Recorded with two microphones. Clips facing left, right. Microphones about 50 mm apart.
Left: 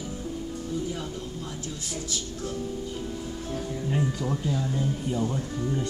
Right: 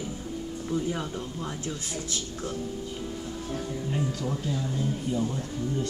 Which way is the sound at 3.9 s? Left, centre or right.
Centre.